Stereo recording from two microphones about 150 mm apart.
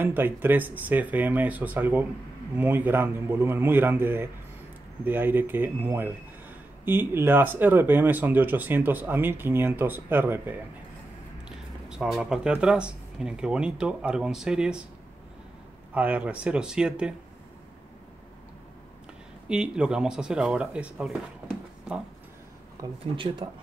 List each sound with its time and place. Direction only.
0.0 s speech: 15° right (ahead or behind)
15.9 s speech: 10° right (ahead or behind)
19.5 s speech: 5° right (ahead or behind)
22.8 s speech: 30° right (ahead or behind)